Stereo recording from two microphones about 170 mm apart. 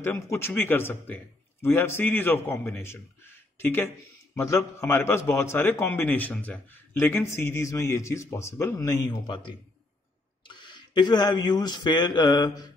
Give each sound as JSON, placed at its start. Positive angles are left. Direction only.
{"t": 0.0, "sound": "a man's voice", "side_deg": 15}
{"t": 10.5, "sound": "speech", "side_deg": 25}